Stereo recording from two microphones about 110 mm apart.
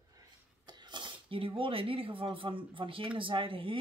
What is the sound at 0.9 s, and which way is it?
Speech, 45° right (ahead or behind).